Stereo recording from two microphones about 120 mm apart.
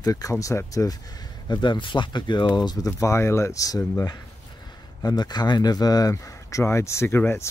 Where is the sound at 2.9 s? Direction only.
25° left (ahead or behind).